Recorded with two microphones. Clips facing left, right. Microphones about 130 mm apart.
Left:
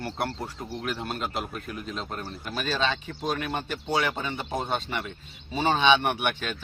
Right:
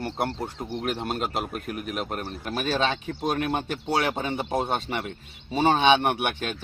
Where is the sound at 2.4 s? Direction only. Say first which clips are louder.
Right 2 dB; 50° right (ahead or behind).